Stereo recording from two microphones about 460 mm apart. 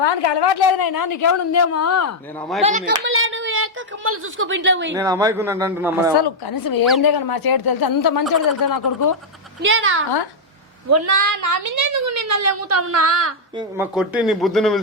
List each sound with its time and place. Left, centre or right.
0.0 s a woman's voice: left
2.6 s speech: centre
4.9 s a man's voice: centre
6.1 s speech: left
9.6 s speech: right
10.8 s a woman's voice: right
13.6 s speech: centre